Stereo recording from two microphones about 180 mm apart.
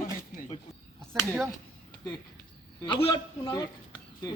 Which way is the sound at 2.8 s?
25° left (ahead or behind).